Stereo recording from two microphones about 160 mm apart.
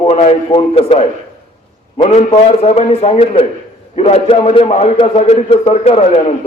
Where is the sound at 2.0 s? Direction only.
40° left (ahead or behind).